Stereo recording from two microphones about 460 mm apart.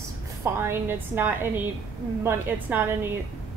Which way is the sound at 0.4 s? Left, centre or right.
Centre.